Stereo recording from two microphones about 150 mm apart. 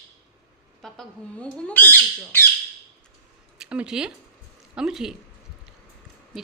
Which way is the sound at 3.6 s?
5° right (ahead or behind).